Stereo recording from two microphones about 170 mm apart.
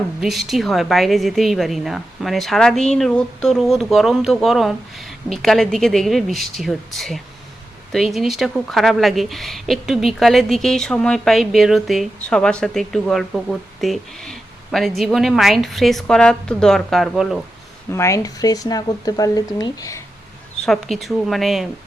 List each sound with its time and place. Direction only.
0.2 s speech: centre (ahead or behind)
17.9 s speech: 15° left (ahead or behind)
20.6 s speech: centre (ahead or behind)